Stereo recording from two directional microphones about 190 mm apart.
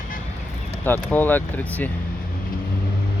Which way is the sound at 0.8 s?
10° left (ahead or behind).